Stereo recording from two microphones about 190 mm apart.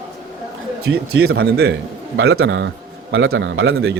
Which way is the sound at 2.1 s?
85° right.